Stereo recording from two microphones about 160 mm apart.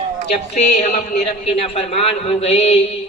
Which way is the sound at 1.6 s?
40° left (ahead or behind).